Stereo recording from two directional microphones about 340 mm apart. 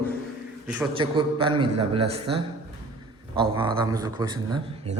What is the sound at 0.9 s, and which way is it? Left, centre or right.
A man's voice, centre.